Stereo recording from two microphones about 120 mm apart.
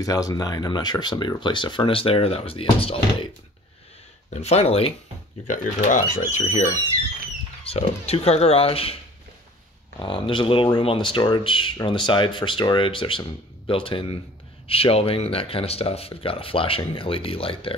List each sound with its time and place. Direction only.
0.0 s speech: 30° left (ahead or behind); by 3.3 s 50° left (ahead or behind)
4.3 s speech: 65° left (ahead or behind)
5.5 s speech: 90° left; by 6.8 s 75° left (ahead or behind)
7.6 s speech: 55° left (ahead or behind)
9.9 s speech: 45° left (ahead or behind)